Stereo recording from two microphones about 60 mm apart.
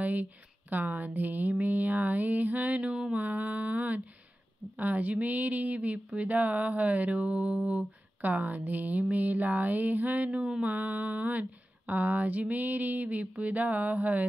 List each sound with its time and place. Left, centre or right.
0.0 s speech: right